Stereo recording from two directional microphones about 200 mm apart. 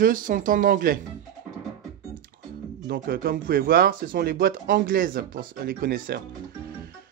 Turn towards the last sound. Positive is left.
turn(degrees=-45)  # may be behind; listen again after turning